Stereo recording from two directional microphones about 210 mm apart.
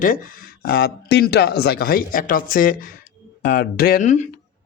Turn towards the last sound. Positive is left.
turn(degrees=35)  # may be behind; listen again after turning